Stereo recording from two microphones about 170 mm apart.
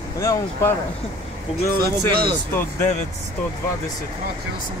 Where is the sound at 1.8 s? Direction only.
65° right (ahead or behind).